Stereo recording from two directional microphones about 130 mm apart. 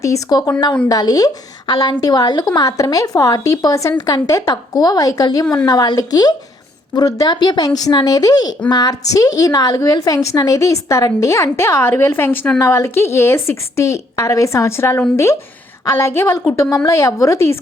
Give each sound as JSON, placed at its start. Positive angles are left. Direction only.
{"t": 0.0, "sound": "a woman's voice", "side_deg": 30}